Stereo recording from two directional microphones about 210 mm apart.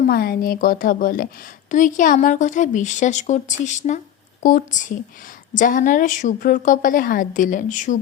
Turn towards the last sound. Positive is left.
turn(degrees=35)  # may be behind; listen again after turning